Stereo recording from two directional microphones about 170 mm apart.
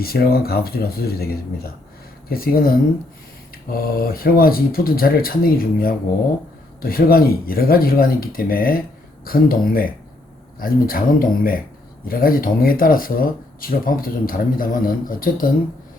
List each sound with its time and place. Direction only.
0.0 s speech: 60° left (ahead or behind)